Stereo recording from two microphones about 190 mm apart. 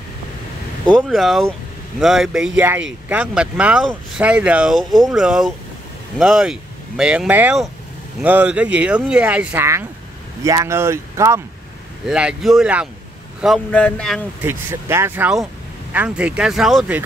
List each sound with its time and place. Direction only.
0.8 s speech: centre (ahead or behind)
14.4 s speech: 10° right (ahead or behind)